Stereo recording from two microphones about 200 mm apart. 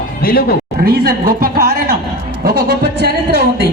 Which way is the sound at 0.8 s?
50° right (ahead or behind).